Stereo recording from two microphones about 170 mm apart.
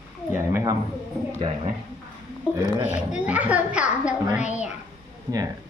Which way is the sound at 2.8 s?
10° right (ahead or behind).